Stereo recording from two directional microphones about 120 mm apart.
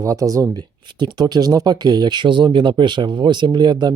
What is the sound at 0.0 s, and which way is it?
Speech, 30° right (ahead or behind).